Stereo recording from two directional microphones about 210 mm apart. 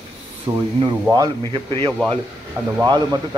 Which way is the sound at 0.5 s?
15° right (ahead or behind).